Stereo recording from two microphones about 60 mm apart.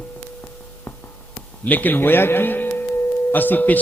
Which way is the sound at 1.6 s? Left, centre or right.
Left.